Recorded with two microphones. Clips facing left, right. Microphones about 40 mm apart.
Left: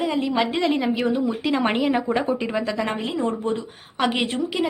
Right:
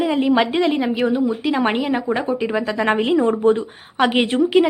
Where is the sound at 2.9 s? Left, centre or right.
Right.